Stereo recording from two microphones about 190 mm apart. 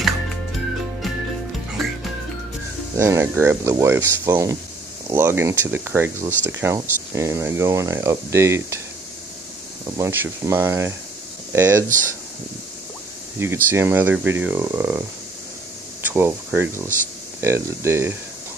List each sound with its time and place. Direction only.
3.0 s speech: 15° right (ahead or behind)
9.9 s speech: 15° right (ahead or behind)
13.4 s speech: 10° right (ahead or behind)